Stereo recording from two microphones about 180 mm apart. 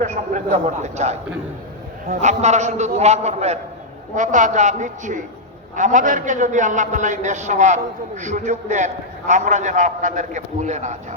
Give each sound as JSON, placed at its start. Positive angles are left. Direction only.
{"t": 0.0, "sound": "a man's voice", "side_deg": -40}